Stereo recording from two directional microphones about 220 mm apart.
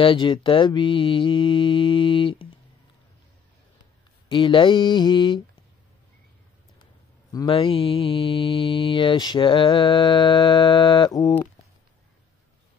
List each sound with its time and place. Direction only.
0.0 s mantra: 20° left (ahead or behind)
4.3 s mantra: 20° left (ahead or behind)
7.3 s mantra: 20° left (ahead or behind)